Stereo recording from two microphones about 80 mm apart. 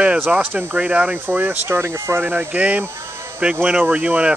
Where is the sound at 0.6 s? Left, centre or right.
Centre; by 2.2 s right.